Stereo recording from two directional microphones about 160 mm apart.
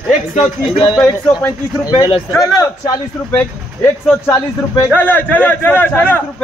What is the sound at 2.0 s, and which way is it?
Speech, 25° left (ahead or behind).